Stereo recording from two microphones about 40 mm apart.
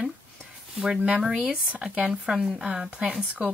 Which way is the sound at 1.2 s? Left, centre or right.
Centre.